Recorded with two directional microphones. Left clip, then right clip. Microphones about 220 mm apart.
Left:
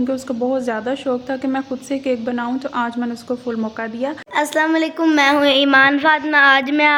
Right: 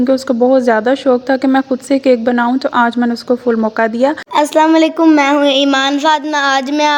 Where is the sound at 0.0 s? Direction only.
30° right (ahead or behind).